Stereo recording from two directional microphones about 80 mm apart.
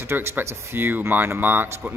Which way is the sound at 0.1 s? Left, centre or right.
Right.